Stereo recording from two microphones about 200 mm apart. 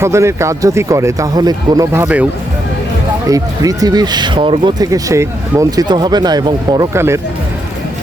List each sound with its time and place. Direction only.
0.0 s speech: 15° right (ahead or behind)
3.2 s speech: 15° right (ahead or behind)